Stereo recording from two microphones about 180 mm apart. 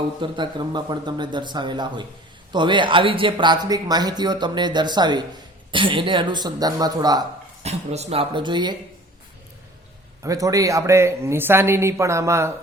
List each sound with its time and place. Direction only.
0.2 s speech: 25° right (ahead or behind)
7.6 s speech: 35° right (ahead or behind)
10.2 s speech: 20° right (ahead or behind)